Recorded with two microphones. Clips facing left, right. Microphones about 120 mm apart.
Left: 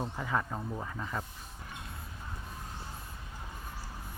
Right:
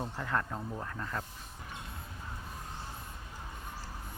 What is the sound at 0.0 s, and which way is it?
Speech, 5° left (ahead or behind).